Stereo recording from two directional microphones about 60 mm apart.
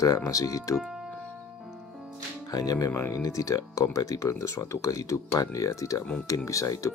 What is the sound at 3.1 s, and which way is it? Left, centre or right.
Speech, left.